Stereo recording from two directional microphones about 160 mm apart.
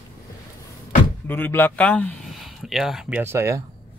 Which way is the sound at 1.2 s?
10° left (ahead or behind).